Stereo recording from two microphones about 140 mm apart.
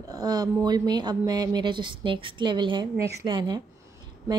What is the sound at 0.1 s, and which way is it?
A woman's voice, 30° right (ahead or behind).